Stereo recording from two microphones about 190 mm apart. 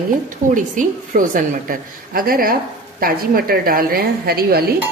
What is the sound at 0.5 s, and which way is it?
Speech, 45° right (ahead or behind).